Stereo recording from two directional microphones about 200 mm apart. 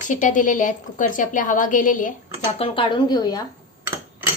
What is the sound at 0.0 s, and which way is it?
A woman's voice, 40° left (ahead or behind).